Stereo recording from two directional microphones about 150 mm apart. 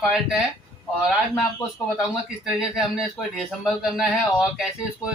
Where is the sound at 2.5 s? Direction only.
5° right (ahead or behind).